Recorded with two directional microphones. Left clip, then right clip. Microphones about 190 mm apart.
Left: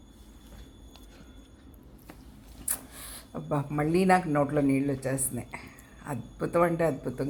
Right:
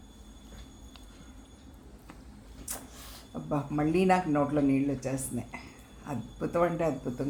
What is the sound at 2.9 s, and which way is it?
A man's voice, 20° left (ahead or behind).